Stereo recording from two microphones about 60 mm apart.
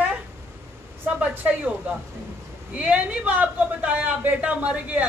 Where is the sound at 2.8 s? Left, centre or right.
Right.